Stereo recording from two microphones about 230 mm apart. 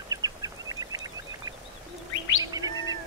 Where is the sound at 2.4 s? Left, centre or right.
Centre.